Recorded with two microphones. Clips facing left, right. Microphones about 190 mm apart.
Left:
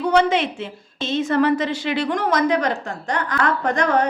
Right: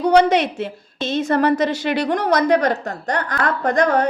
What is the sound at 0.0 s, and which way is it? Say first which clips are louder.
A woman's voice: right 3 dB; 40° right (ahead or behind).